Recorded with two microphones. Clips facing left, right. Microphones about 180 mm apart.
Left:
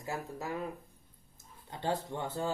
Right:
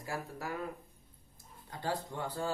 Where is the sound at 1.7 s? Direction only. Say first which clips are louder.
Left 3 dB; 25° left (ahead or behind).